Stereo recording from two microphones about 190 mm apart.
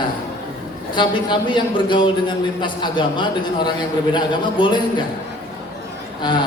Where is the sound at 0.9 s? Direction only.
25° left (ahead or behind).